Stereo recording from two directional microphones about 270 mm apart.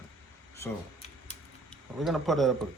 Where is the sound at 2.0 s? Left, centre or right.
Centre.